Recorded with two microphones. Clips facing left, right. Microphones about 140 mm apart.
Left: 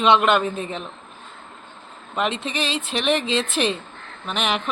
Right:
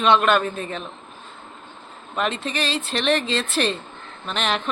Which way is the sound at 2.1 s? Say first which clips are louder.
Even; 20° left (ahead or behind).